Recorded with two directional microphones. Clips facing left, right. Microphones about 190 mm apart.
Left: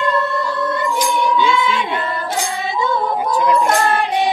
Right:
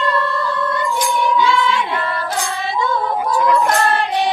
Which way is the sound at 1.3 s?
20° left (ahead or behind).